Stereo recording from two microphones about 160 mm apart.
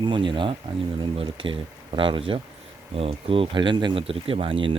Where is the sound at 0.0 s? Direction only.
30° right (ahead or behind).